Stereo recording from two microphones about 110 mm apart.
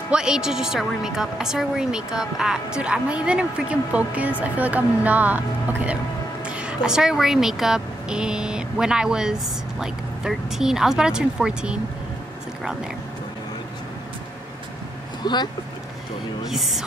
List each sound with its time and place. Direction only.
0.1 s a woman's voice: 5° right (ahead or behind)
15.2 s speech: 40° left (ahead or behind)
16.4 s a woman's voice: centre (ahead or behind)